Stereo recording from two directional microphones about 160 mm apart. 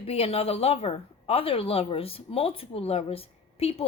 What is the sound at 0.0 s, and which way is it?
A woman's voice, 40° left (ahead or behind).